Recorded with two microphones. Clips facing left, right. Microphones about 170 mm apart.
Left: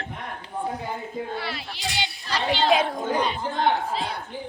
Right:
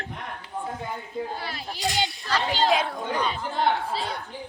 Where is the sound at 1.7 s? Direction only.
45° right (ahead or behind).